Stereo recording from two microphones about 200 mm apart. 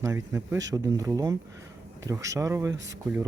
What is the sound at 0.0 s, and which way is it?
Speech, 15° right (ahead or behind).